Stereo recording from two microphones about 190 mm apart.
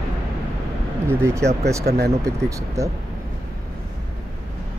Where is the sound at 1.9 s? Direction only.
55° right (ahead or behind).